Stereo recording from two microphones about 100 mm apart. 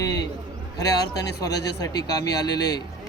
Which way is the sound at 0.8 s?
40° left (ahead or behind).